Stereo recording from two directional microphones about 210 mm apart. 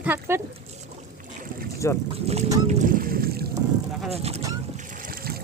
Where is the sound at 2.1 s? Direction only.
30° right (ahead or behind).